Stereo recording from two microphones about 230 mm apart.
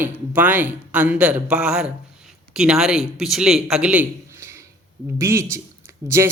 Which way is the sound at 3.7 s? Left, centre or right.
Centre.